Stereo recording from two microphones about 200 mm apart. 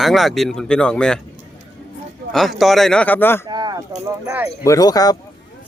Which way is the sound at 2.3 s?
Centre (ahead or behind).